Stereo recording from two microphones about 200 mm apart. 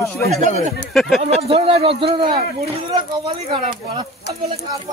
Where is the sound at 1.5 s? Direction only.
30° right (ahead or behind).